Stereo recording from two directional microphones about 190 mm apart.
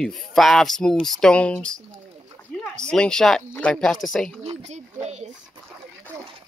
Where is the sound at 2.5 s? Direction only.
5° left (ahead or behind).